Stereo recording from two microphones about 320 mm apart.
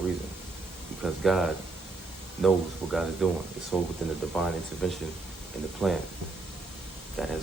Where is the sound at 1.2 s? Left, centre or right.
Centre.